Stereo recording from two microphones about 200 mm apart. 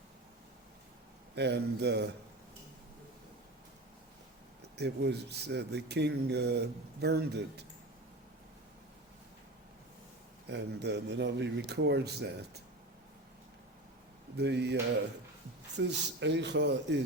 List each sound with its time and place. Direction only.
1.4 s speech: 55° right (ahead or behind)
4.8 s speech: 55° right (ahead or behind)
10.4 s speech: 60° right (ahead or behind)
14.3 s speech: 55° right (ahead or behind)